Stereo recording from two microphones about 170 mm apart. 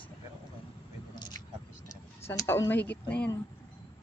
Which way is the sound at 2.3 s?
15° left (ahead or behind).